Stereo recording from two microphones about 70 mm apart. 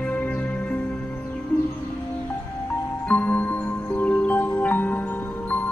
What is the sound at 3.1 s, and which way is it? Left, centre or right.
Music, left.